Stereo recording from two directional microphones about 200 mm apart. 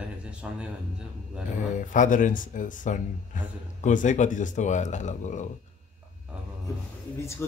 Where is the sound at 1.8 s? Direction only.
40° left (ahead or behind).